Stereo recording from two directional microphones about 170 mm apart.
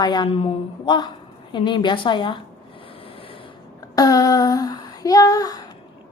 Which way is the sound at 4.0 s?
20° left (ahead or behind).